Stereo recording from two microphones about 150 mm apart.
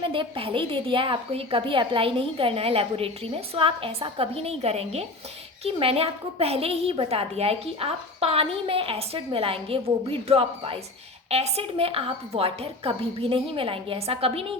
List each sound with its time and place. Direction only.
0.1 s a woman's voice: 35° right (ahead or behind)